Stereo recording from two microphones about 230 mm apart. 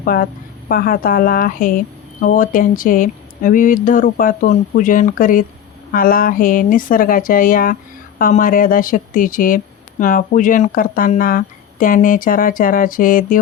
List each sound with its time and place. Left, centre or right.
0.0 s a woman's voice: left